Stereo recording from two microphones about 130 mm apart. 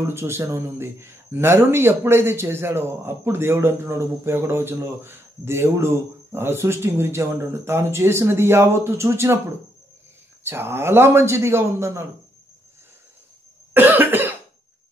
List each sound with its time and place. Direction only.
0.1 s a man's voice: 20° right (ahead or behind)
10.4 s a man's voice: 20° right (ahead or behind)
13.7 s cough: 15° right (ahead or behind)